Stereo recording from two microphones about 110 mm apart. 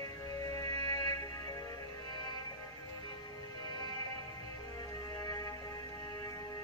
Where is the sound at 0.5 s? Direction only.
35° left (ahead or behind).